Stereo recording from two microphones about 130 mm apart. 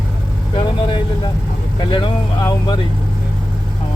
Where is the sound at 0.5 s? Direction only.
40° left (ahead or behind).